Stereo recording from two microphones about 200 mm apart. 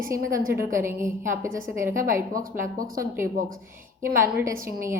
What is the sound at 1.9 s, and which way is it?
A woman's voice, 40° right (ahead or behind).